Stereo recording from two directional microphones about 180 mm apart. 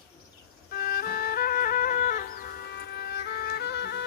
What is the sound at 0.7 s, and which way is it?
Music, 55° left (ahead or behind).